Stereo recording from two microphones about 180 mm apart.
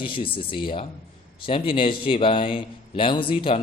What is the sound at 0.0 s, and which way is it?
A man's voice, 30° left (ahead or behind).